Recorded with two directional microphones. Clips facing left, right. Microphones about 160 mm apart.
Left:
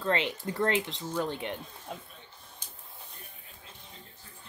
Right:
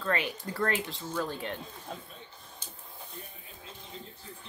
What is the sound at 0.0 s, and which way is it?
Speech, 20° left (ahead or behind).